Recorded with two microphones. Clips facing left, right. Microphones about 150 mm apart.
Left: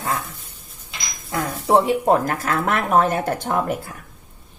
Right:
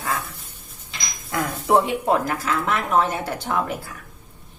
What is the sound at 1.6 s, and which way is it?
Speech, 30° left (ahead or behind).